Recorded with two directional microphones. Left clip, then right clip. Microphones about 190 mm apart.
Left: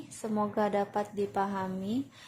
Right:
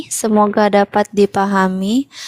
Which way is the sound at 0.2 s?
50° right (ahead or behind).